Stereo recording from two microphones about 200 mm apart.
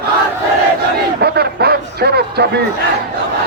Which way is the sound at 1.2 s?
55° right (ahead or behind).